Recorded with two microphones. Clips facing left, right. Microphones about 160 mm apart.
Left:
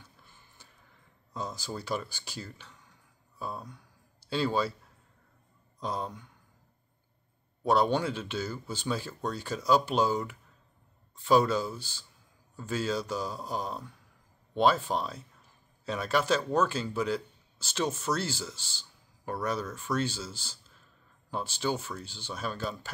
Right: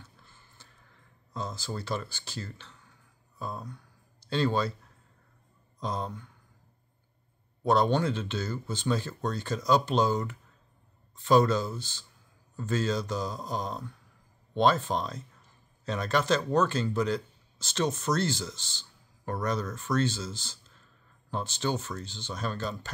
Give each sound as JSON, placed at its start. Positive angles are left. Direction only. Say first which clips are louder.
{"t": 0.0, "sound": "a sound", "louder": "right 2 dB", "side_deg": 15}
{"t": 1.3, "sound": "a man's voice", "louder": "right 1 dB", "side_deg": 15}
{"t": 5.8, "sound": "a man's voice", "louder": "right 1 dB", "side_deg": 10}
{"t": 7.6, "sound": "a man's voice", "louder": "right 1 dB", "side_deg": 10}